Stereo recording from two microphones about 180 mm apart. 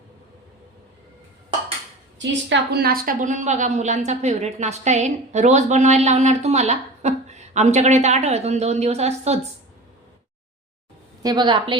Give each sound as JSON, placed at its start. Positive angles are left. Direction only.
{"t": 2.1, "sound": "a woman's voice", "side_deg": -75}
{"t": 11.2, "sound": "a woman's voice", "side_deg": -25}